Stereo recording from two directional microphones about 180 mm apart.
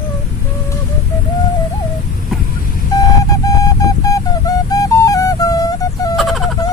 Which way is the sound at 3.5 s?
20° left (ahead or behind).